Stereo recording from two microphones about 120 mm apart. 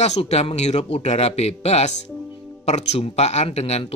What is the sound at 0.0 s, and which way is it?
Speech, 60° left (ahead or behind).